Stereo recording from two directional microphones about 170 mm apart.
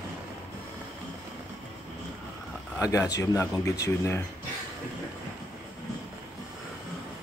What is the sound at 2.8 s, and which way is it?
Speech, 20° left (ahead or behind).